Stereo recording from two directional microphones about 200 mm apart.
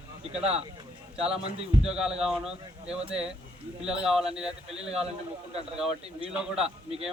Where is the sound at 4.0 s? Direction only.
Centre (ahead or behind).